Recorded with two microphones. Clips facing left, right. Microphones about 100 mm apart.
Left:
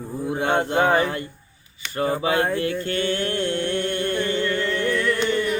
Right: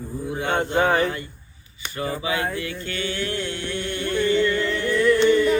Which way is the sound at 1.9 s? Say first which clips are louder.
Left 5 dB; 45° left (ahead or behind).